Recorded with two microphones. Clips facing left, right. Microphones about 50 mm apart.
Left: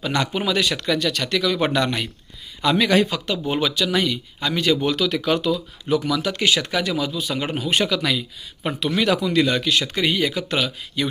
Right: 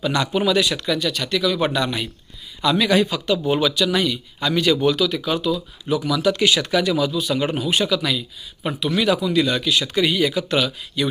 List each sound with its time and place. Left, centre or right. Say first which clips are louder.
0.0 s speech: right 3 dB; left
1.5 s speech: even; left
2.6 s speech: even; left
4.9 s speech: even; left
7.6 s speech: right 1 dB; left